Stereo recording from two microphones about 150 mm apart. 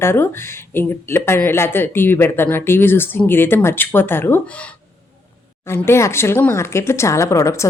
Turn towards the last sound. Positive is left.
turn(degrees=20)  # may be behind; listen again after turning